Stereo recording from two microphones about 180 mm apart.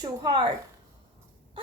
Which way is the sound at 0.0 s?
25° right (ahead or behind).